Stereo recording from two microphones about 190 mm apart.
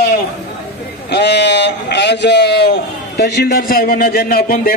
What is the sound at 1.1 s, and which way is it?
A man's voice, 65° left (ahead or behind).